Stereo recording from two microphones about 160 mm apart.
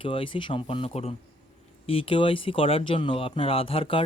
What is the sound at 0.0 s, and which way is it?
Speech, 35° left (ahead or behind).